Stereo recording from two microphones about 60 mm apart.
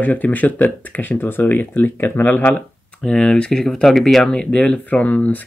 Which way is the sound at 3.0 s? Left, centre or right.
Centre.